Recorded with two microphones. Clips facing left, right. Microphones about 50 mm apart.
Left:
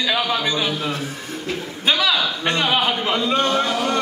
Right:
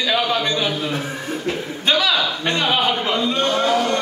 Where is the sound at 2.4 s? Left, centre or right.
Left.